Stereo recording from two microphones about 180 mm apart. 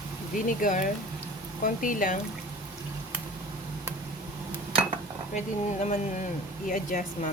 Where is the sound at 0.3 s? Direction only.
50° left (ahead or behind).